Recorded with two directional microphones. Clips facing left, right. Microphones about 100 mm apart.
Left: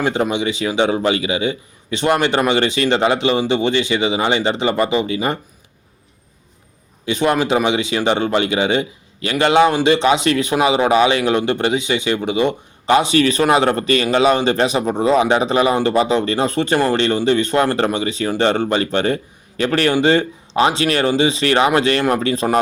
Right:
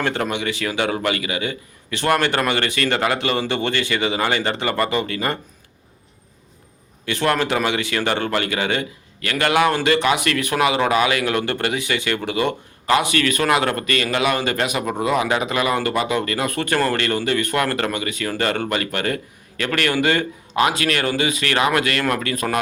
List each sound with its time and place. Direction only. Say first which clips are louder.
0.0 s speech: left 4 dB; 15° left (ahead or behind)
7.0 s speech: left 3 dB; 15° left (ahead or behind)